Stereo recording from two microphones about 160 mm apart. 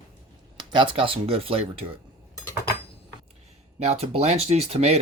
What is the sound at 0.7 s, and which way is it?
Speech, 30° right (ahead or behind).